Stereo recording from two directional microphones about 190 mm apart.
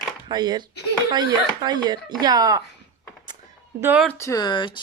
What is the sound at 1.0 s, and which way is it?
Speech, 20° right (ahead or behind).